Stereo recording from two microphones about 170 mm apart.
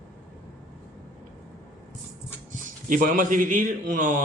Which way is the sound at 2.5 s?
50° right (ahead or behind).